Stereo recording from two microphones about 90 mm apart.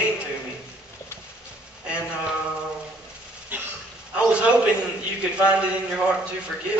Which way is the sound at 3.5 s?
20° right (ahead or behind).